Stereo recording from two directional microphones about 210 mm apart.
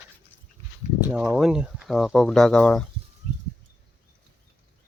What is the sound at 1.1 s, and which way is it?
Speech, 5° right (ahead or behind).